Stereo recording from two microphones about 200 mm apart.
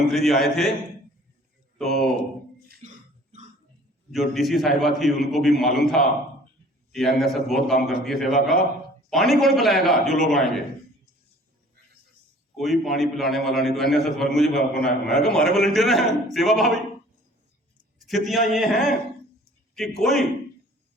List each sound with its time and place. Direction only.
0.1 s a man's voice: centre (ahead or behind)
1.8 s speech: centre (ahead or behind)
2.8 s cough: 35° right (ahead or behind)
4.1 s a man's voice: centre (ahead or behind)
12.5 s a man's voice: centre (ahead or behind)
18.0 s a man's voice: centre (ahead or behind)